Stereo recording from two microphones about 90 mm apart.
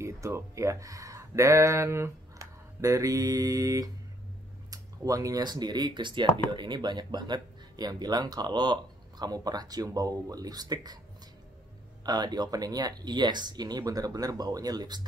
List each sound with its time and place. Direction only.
0.0 s speech: 35° right (ahead or behind)
12.0 s speech: 50° right (ahead or behind)